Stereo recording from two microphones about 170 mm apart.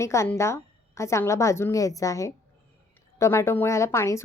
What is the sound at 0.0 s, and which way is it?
A woman's voice, 15° left (ahead or behind).